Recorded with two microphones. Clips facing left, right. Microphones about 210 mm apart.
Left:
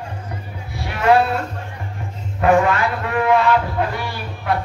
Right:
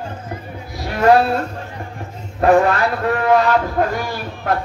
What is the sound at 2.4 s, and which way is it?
A man's voice, 35° right (ahead or behind).